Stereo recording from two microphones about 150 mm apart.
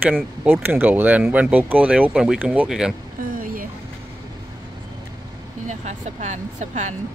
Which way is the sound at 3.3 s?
70° right (ahead or behind).